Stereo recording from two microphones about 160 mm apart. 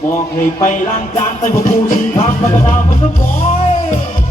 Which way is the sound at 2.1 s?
35° left (ahead or behind).